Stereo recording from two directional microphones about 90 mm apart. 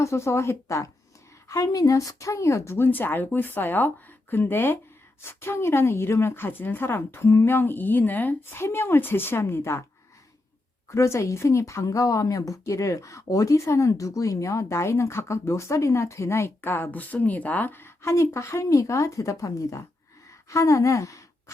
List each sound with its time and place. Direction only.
0.0 s a woman's voice: 30° left (ahead or behind)
10.8 s speech: 35° left (ahead or behind)